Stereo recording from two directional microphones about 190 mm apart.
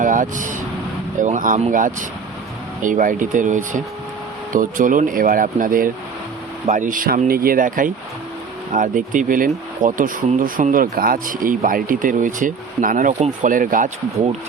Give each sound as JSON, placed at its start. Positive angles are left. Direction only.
{"t": 0.0, "sound": "vehicle", "side_deg": -45}
{"t": 1.2, "sound": "speech", "side_deg": -45}